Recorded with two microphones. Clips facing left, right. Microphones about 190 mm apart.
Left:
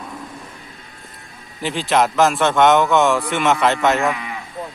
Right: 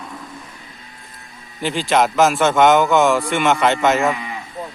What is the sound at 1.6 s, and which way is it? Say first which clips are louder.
A man's voice: right 1 dB; centre (ahead or behind).